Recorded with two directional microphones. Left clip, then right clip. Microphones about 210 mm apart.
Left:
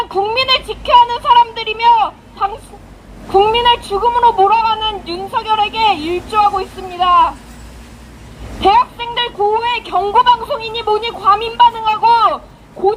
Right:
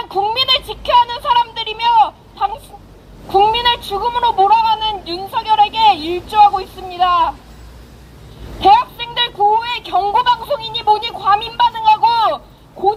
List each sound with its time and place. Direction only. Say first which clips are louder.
0.0 s a sound: left 1 dB; 35° right (ahead or behind)
3.2 s speech: left 2 dB; 35° right (ahead or behind)
8.6 s speech: even; 30° right (ahead or behind)